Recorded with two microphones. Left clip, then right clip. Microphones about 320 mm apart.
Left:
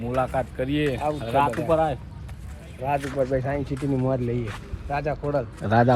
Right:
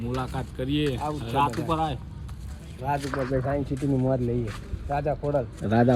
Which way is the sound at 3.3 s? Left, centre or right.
Left.